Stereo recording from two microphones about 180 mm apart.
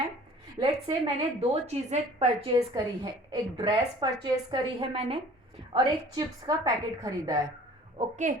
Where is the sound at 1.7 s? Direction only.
35° right (ahead or behind).